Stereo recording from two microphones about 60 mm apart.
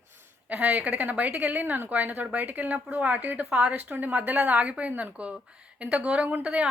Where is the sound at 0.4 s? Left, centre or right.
Right.